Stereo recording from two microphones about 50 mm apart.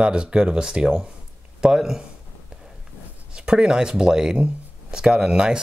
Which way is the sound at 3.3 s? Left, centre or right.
Centre.